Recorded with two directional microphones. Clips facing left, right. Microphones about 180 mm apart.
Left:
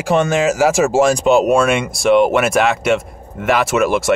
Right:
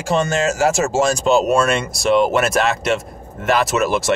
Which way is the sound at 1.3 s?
15° left (ahead or behind).